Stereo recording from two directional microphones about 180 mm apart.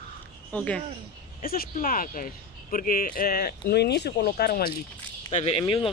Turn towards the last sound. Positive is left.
turn(degrees=30)  # may be behind; listen again after turning